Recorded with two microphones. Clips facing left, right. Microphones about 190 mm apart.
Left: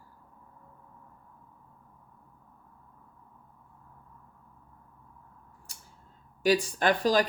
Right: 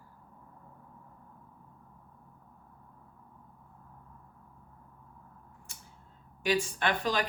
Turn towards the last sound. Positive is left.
turn(degrees=35)  # may be behind; listen again after turning